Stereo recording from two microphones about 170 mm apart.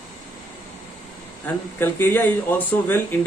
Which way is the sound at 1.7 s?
15° left (ahead or behind).